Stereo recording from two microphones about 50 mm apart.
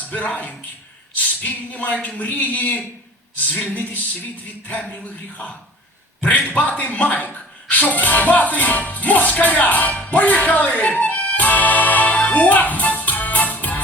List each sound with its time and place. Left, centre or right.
0.1 s music: left
4.6 s a sound: left
7.7 s music: left